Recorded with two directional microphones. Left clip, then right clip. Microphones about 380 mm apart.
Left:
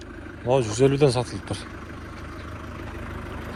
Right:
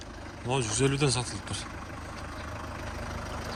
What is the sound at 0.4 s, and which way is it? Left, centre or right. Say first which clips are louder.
Speech: left 8 dB; centre.